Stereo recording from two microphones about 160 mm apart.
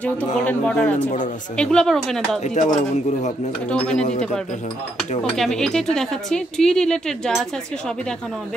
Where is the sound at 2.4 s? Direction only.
45° left (ahead or behind).